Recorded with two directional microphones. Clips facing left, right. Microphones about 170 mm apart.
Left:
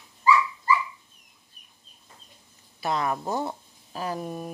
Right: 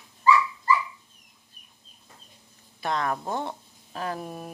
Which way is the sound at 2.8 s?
5° left (ahead or behind).